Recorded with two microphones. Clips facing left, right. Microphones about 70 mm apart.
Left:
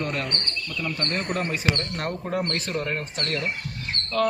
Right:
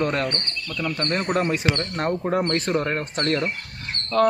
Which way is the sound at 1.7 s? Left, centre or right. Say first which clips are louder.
Right 4 dB; right.